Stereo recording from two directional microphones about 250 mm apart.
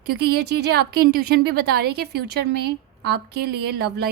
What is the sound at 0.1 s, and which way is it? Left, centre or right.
A woman's voice, right.